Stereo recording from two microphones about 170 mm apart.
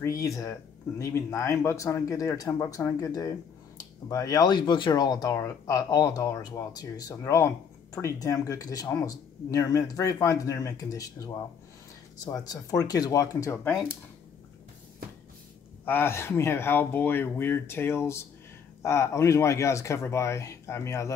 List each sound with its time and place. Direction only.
0.0 s speech: 20° left (ahead or behind)
15.8 s speech: 10° left (ahead or behind)